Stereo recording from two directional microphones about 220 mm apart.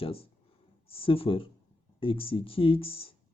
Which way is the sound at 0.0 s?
25° left (ahead or behind).